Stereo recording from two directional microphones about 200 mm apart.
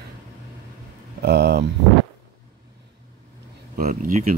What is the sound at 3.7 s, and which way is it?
Speech, 45° right (ahead or behind).